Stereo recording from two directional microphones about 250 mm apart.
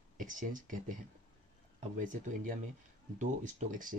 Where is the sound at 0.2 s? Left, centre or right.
Right.